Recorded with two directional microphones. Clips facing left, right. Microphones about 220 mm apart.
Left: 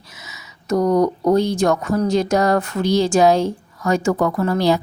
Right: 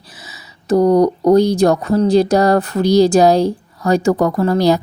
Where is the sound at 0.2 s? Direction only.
35° right (ahead or behind).